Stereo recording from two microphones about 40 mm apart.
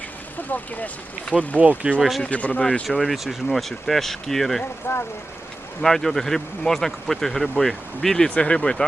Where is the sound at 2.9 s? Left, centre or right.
Centre.